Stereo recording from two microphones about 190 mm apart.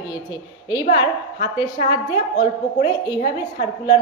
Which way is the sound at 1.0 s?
25° left (ahead or behind).